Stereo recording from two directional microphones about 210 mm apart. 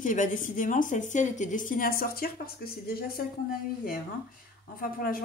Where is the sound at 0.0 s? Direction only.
35° left (ahead or behind).